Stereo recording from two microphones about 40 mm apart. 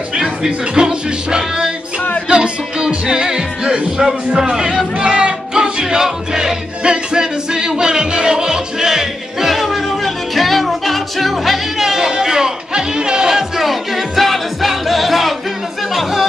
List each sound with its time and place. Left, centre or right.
0.1 s music: centre
4.4 s crowd: centre
6.8 s music: right
9.5 s music: centre
12.1 s speech: centre